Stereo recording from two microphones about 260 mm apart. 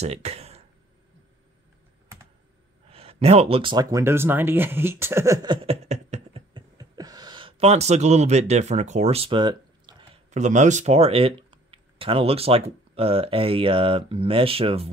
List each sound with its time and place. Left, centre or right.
0.0 s speech: right
2.9 s speech: right
10.3 s speech: right